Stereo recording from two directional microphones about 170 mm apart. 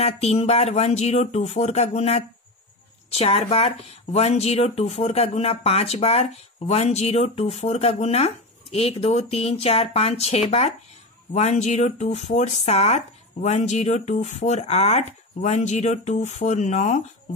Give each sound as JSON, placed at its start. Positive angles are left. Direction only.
{"t": 0.0, "sound": "speech", "side_deg": 40}